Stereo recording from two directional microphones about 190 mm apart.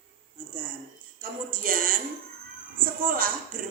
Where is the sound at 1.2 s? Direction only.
50° right (ahead or behind).